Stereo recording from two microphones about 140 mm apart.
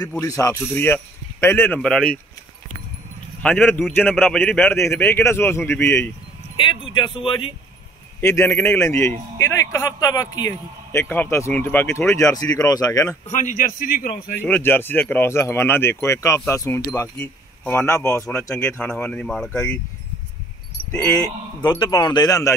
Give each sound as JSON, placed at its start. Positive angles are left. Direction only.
{"t": 0.2, "sound": "speech", "side_deg": 20}
{"t": 1.8, "sound": "speech", "side_deg": 5}
{"t": 3.4, "sound": "speech", "side_deg": 10}
{"t": 6.5, "sound": "speech", "side_deg": 35}
{"t": 8.2, "sound": "speech", "side_deg": 20}
{"t": 10.9, "sound": "speech", "side_deg": 15}
{"t": 13.3, "sound": "a man's voice", "side_deg": 60}
{"t": 14.4, "sound": "speech", "side_deg": 15}
{"t": 18.6, "sound": "speech", "side_deg": 10}
{"t": 21.6, "sound": "speech", "side_deg": 25}